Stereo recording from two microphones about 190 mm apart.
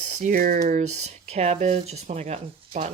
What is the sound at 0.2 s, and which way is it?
Speech, 45° right (ahead or behind).